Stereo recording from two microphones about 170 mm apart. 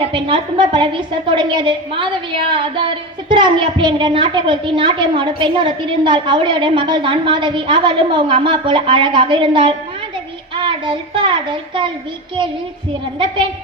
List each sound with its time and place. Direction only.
0.0 s a woman's voice: 30° right (ahead or behind)
10.5 s a sound: 30° right (ahead or behind)
13.1 s a child's voice: 30° right (ahead or behind)